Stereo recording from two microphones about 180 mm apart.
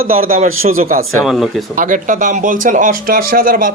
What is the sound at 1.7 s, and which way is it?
Speech, 45° right (ahead or behind).